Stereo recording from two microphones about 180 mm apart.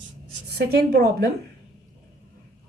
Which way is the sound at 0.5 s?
60° right (ahead or behind).